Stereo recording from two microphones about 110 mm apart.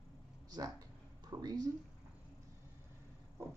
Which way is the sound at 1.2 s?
40° right (ahead or behind).